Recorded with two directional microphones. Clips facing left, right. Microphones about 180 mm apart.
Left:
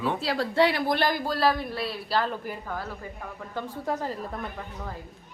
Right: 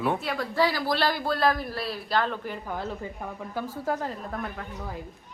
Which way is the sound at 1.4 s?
Centre (ahead or behind).